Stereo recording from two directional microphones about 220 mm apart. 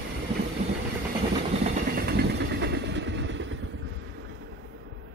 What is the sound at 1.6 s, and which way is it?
Vehicle, 45° right (ahead or behind).